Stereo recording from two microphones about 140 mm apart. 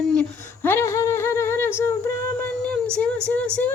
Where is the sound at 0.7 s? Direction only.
20° left (ahead or behind).